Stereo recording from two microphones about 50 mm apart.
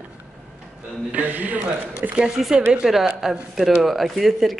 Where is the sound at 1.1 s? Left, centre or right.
Right.